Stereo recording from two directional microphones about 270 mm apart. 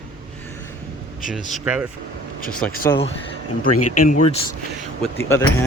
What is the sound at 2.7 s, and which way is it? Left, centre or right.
Speech, left.